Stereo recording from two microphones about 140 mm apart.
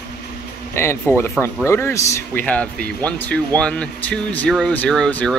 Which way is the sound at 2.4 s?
10° left (ahead or behind).